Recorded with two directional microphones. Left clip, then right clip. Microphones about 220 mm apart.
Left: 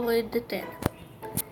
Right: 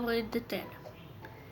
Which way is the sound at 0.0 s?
Centre (ahead or behind).